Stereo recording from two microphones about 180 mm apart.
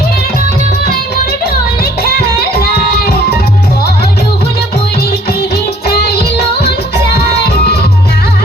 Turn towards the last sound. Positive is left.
turn(degrees=60)  # may be behind; listen again after turning